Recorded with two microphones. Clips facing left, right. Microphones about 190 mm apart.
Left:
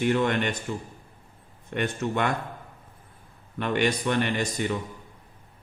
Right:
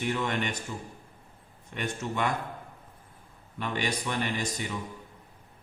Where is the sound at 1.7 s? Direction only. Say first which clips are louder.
Left 6 dB; 60° left (ahead or behind).